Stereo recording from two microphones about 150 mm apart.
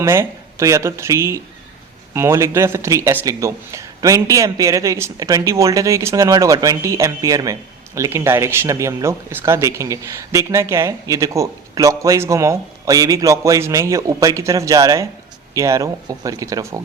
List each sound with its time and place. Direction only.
0.0 s speech: 20° right (ahead or behind)